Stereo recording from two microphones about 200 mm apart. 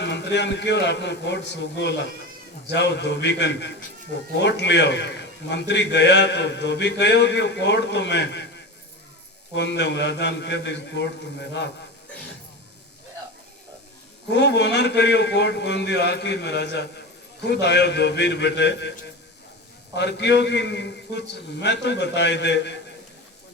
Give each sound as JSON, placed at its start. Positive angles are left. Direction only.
{"t": 0.0, "sound": "a man's voice", "side_deg": 60}
{"t": 14.3, "sound": "a man's voice", "side_deg": 60}
{"t": 20.0, "sound": "a man's voice", "side_deg": 60}